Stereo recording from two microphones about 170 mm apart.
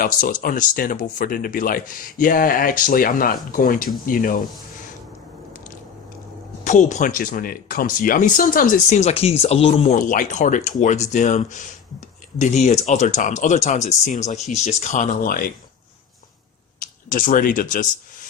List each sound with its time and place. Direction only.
0.0 s speech: 55° left (ahead or behind)
6.7 s speech: 45° left (ahead or behind)
10.0 s speech: 50° left (ahead or behind)
17.1 s speech: 50° left (ahead or behind)